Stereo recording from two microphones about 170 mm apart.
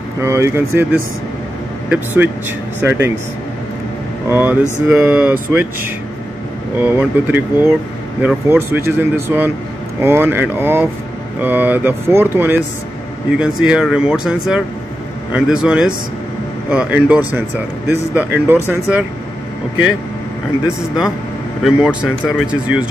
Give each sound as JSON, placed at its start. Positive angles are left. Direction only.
{"t": 0.2, "sound": "speech", "side_deg": -15}
{"t": 2.8, "sound": "speech", "side_deg": -10}
{"t": 4.3, "sound": "speech", "side_deg": -15}
{"t": 6.8, "sound": "speech", "side_deg": -10}
{"t": 20.6, "sound": "speech", "side_deg": -5}